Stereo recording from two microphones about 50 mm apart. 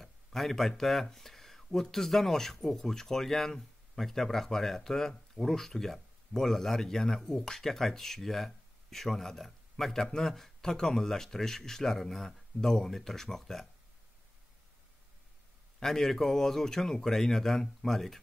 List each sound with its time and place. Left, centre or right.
0.0 s a man's voice: centre
15.8 s speech: centre